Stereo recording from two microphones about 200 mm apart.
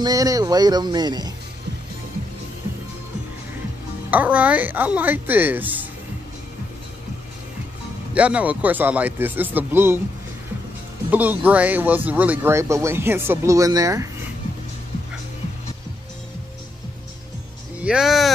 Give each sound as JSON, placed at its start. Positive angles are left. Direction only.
{"t": 0.0, "sound": "speech", "side_deg": -20}
{"t": 4.1, "sound": "speech", "side_deg": -10}
{"t": 8.1, "sound": "speech", "side_deg": -5}
{"t": 11.1, "sound": "speech", "side_deg": -10}
{"t": 17.7, "sound": "speech", "side_deg": -5}